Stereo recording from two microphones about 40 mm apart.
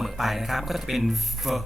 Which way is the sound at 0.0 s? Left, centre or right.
Centre.